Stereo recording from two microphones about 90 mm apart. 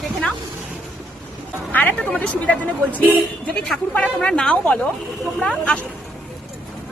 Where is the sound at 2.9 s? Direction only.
20° right (ahead or behind).